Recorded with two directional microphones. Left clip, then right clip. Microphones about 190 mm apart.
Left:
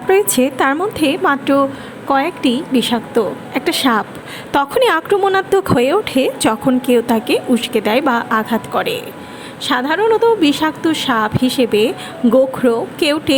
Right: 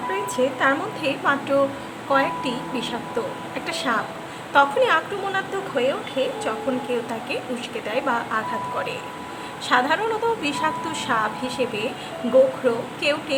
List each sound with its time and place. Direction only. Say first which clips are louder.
0.1 s a woman's voice: left 11 dB; 45° left (ahead or behind)